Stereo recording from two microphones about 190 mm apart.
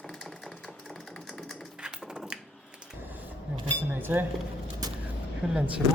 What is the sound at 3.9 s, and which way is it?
Cutlery, 10° right (ahead or behind).